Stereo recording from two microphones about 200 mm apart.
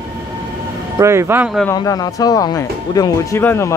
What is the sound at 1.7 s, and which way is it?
Speech, 20° left (ahead or behind).